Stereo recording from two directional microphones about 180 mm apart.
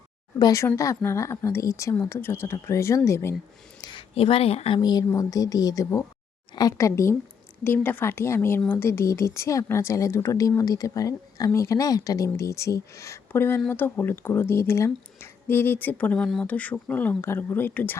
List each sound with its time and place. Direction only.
0.3 s a woman's voice: 20° left (ahead or behind)
3.8 s a woman's voice: 25° left (ahead or behind)